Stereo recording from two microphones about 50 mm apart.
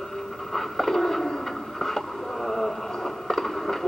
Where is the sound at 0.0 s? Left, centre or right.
Centre.